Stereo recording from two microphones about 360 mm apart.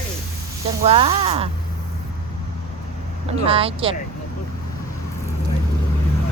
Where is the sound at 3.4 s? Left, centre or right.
Centre.